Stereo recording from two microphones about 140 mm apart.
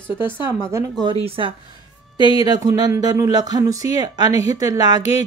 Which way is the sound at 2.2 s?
30° right (ahead or behind).